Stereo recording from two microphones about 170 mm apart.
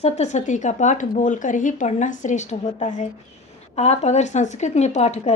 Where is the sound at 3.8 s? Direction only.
40° left (ahead or behind).